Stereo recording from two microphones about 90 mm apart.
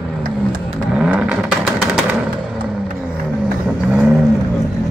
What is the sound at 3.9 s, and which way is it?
Vehicle, 15° right (ahead or behind).